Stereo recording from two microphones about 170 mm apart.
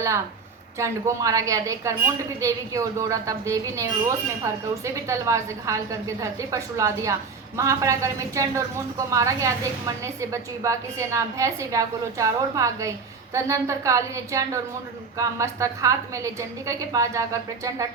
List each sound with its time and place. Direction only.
0.8 s a woman's voice: 20° right (ahead or behind)